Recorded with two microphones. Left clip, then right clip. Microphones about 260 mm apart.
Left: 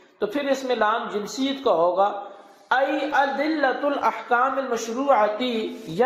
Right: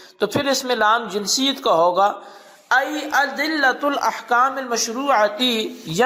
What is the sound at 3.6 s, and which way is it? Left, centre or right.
Speech, right.